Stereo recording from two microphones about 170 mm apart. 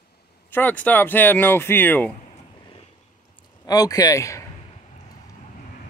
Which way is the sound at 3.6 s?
20° left (ahead or behind).